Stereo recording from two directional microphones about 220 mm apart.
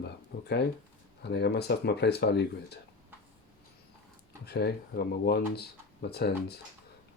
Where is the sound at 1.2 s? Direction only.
50° left (ahead or behind).